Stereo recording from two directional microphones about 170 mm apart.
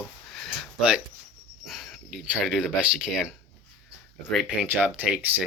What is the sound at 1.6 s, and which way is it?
Speech, centre (ahead or behind).